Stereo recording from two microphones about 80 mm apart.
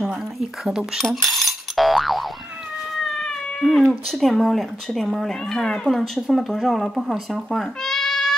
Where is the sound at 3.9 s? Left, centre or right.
Centre.